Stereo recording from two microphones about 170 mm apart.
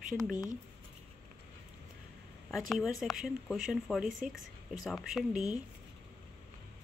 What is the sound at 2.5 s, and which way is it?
Speech, centre (ahead or behind).